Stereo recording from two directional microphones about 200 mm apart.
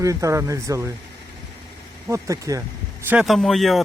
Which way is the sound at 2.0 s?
15° right (ahead or behind).